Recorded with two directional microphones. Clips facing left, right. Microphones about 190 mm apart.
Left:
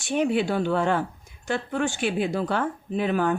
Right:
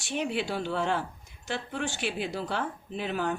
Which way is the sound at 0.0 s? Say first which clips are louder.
Left 7 dB; 50° left (ahead or behind).